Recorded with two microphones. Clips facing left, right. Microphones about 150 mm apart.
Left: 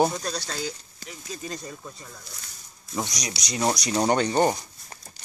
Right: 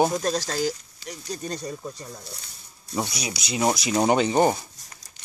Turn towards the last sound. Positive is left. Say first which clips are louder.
# right 2 dB
turn(degrees=-10)  # may be behind; listen again after turning